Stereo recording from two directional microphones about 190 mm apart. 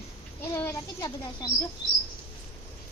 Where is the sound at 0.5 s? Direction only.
15° left (ahead or behind).